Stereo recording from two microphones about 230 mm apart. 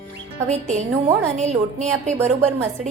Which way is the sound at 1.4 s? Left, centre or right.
Right.